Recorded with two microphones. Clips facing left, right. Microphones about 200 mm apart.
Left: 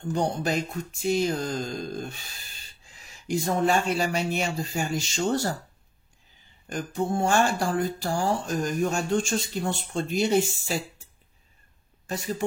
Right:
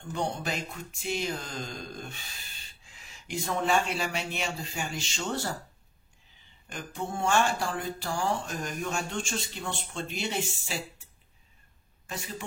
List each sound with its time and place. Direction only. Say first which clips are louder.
0.1 s music: left 6 dB; 40° left (ahead or behind)
6.7 s music: left 8 dB; 40° left (ahead or behind)
12.1 s speech: left 9 dB; 40° left (ahead or behind)